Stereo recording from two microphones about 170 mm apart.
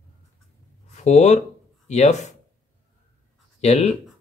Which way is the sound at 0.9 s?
45° left (ahead or behind).